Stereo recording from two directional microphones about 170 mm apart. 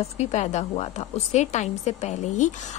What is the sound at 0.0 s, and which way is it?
A woman's voice, 40° left (ahead or behind).